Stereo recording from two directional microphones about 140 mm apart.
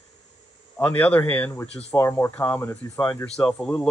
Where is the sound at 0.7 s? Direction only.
10° left (ahead or behind).